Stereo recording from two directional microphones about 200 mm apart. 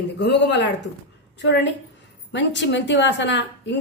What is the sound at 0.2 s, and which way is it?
A woman's voice, 60° left (ahead or behind).